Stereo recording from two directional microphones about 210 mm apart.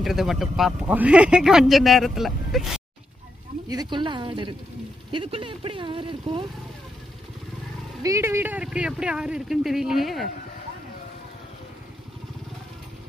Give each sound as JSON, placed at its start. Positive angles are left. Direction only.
{"t": 0.0, "sound": "speech", "side_deg": 0}
{"t": 3.6, "sound": "speech", "side_deg": -20}
{"t": 8.0, "sound": "speech", "side_deg": -15}